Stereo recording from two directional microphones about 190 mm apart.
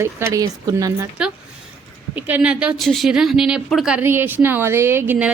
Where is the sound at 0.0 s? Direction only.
15° right (ahead or behind).